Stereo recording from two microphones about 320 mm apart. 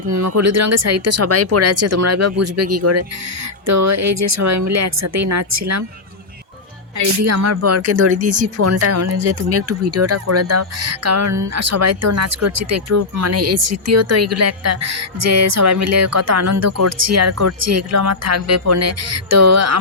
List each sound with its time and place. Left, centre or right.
0.1 s speech: right
7.0 s speech: right